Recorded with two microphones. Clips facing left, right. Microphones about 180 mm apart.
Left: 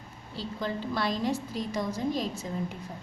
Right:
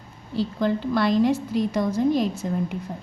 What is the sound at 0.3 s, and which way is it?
A woman's voice, 60° right (ahead or behind).